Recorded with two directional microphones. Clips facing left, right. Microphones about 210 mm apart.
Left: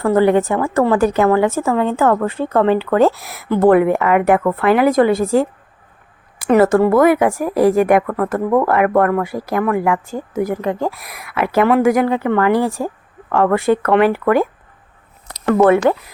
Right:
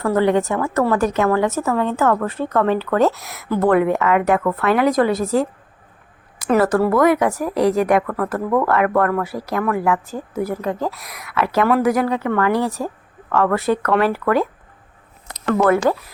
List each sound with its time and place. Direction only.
0.0 s a woman's voice: 30° left (ahead or behind)
6.6 s a woman's voice: 25° left (ahead or behind)
7.5 s speech: 5° left (ahead or behind)
7.9 s a woman's voice: 25° left (ahead or behind)
15.4 s a woman's voice: 25° left (ahead or behind)